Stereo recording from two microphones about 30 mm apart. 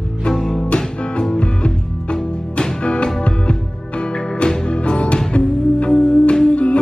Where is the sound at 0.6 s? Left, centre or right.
Left.